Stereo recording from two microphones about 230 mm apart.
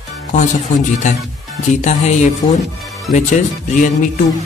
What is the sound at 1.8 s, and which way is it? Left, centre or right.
Speech, left.